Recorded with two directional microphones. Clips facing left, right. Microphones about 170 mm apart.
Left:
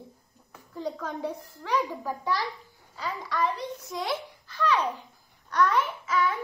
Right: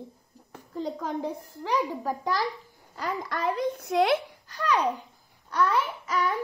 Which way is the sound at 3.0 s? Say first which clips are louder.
Left 1 dB; 50° right (ahead or behind).